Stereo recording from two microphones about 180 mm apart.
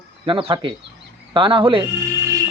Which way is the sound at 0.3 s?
30° right (ahead or behind).